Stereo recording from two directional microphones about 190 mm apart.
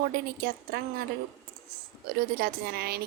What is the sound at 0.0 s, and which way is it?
A woman's voice, 55° right (ahead or behind).